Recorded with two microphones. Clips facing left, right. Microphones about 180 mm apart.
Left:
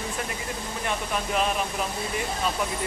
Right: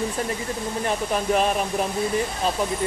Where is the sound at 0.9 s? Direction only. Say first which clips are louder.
Right 5 dB; 40° right (ahead or behind).